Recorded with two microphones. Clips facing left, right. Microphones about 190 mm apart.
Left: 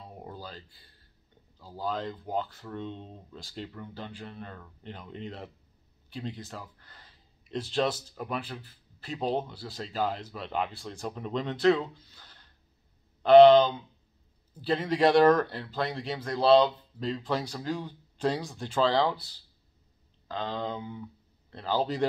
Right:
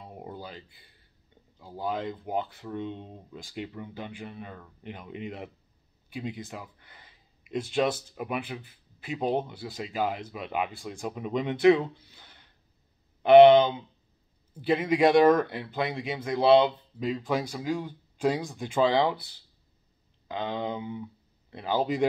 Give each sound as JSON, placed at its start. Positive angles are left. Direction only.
{"t": 0.0, "sound": "a sound", "side_deg": -15}
{"t": 1.6, "sound": "speech", "side_deg": -15}
{"t": 20.2, "sound": "speech", "side_deg": -15}